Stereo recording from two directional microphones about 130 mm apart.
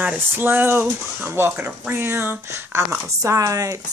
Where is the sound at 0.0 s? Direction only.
15° right (ahead or behind).